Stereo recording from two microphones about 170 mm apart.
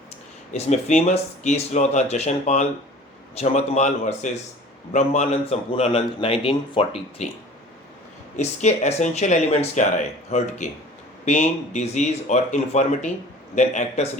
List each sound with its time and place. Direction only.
0.5 s a man's voice: 40° left (ahead or behind)
8.4 s a man's voice: 40° left (ahead or behind)